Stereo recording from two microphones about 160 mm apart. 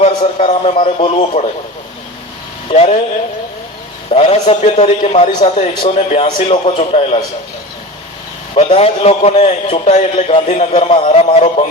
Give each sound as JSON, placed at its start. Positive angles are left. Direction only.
{"t": 0.0, "sound": "a man's voice", "side_deg": 45}
{"t": 2.6, "sound": "a man's voice", "side_deg": 40}
{"t": 4.1, "sound": "a man's voice", "side_deg": 40}
{"t": 8.5, "sound": "a man's voice", "side_deg": 40}